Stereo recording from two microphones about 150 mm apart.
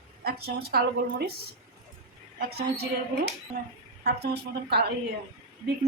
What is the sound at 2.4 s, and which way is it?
Speech, 90° right.